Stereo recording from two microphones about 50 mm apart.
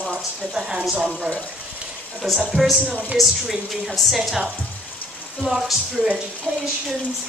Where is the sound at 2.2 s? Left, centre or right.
Centre.